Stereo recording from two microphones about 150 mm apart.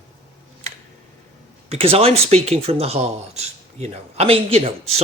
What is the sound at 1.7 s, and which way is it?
Speech, 40° right (ahead or behind).